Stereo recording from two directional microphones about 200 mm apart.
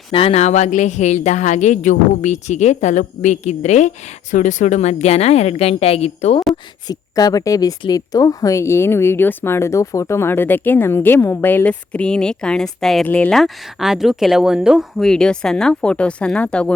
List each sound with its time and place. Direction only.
0.1 s speech: 30° left (ahead or behind)
6.8 s a woman's voice: 20° left (ahead or behind)